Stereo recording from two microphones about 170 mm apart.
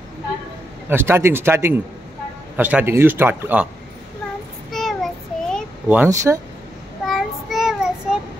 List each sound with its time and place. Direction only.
0.8 s a man's voice: 15° right (ahead or behind)
4.6 s child singing: centre (ahead or behind)
5.9 s a man's voice: 15° right (ahead or behind)
7.1 s child singing: centre (ahead or behind)